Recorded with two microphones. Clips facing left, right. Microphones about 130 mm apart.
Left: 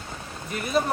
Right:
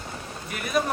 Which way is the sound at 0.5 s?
30° left (ahead or behind).